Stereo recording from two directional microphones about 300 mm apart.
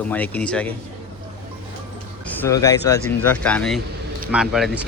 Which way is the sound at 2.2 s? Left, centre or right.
Centre.